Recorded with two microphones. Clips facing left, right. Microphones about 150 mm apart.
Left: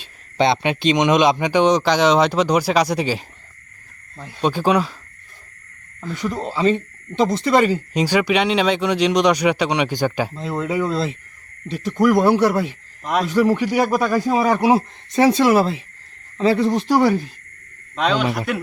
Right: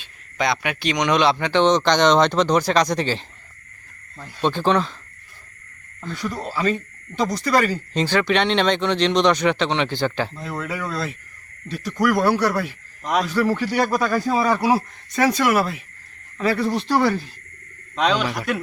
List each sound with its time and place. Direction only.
0.0 s speech: 30° left (ahead or behind); by 4.9 s 10° left (ahead or behind)
6.1 s speech: 20° left (ahead or behind)
17.9 s a man's voice: centre (ahead or behind)